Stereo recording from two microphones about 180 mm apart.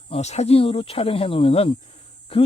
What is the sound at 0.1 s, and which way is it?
Speech, 40° left (ahead or behind).